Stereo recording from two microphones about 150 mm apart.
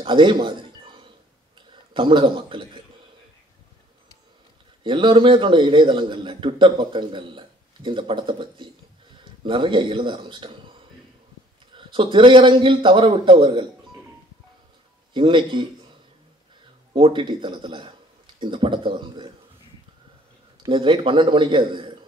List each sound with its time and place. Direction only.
0.0 s a sound: 35° right (ahead or behind)
1.7 s a man's voice: 35° right (ahead or behind)
4.8 s a man's voice: 35° right (ahead or behind)
15.1 s a man's voice: 35° right (ahead or behind)
16.9 s speech: 35° right (ahead or behind)
20.6 s a man's voice: 35° right (ahead or behind)